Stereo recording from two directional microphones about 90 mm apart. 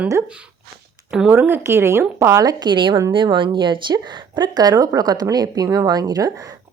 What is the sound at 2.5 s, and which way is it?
Speech, 60° right (ahead or behind).